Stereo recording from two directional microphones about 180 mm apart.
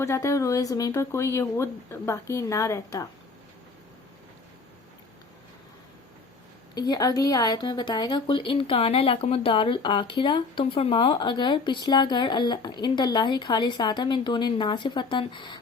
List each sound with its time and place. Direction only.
0.0 s speech: 15° left (ahead or behind)
6.7 s a woman's voice: 20° left (ahead or behind)